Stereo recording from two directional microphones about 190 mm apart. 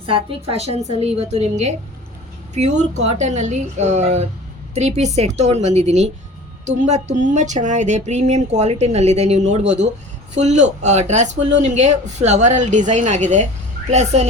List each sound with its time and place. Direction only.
0.0 s speech: 30° right (ahead or behind)